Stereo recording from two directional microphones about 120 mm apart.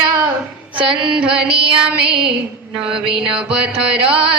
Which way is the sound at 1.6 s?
45° right (ahead or behind).